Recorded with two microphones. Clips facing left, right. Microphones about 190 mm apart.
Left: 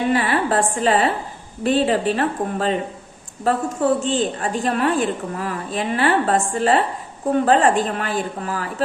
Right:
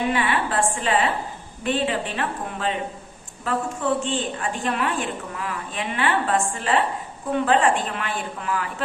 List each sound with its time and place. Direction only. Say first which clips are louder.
0.1 s a woman's voice: left 5 dB; 40° left (ahead or behind)